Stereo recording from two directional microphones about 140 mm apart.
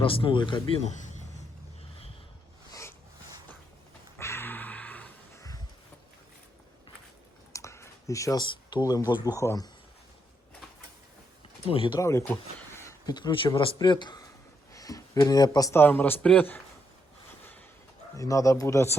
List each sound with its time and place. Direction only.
0.0 s speech: 40° left (ahead or behind)
0.8 s a sound: 60° left (ahead or behind)
4.2 s a sound: 20° left (ahead or behind)
7.5 s a sound: 20° left (ahead or behind)
9.2 s speech: 20° left (ahead or behind)
11.7 s speech: 40° left (ahead or behind)
11.9 s speech: 20° left (ahead or behind)
13.1 s a man's voice: 35° left (ahead or behind); by 16.6 s 10° left (ahead or behind)
18.2 s speech: 25° left (ahead or behind)